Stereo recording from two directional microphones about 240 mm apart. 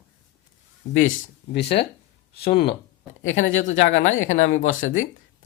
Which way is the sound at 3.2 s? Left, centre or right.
Left.